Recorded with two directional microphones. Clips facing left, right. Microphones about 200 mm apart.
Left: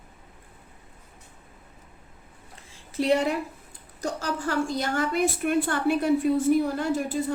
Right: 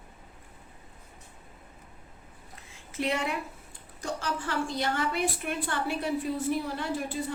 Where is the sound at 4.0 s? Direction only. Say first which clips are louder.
Left 4 dB; 40° left (ahead or behind).